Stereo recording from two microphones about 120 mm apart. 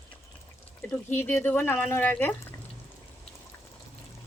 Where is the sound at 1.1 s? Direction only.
20° left (ahead or behind).